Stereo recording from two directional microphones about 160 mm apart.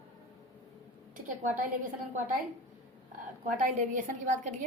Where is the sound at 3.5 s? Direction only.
50° right (ahead or behind).